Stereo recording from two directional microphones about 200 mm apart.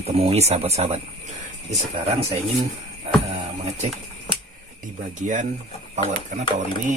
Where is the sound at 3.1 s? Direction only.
30° right (ahead or behind).